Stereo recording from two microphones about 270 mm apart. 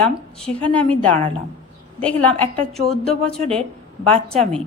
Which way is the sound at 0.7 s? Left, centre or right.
Centre.